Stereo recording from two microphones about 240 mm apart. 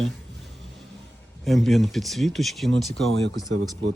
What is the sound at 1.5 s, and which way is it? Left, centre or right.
Speech, centre.